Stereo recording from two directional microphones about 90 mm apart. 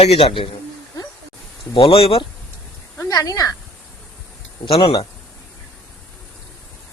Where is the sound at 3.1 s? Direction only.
45° left (ahead or behind).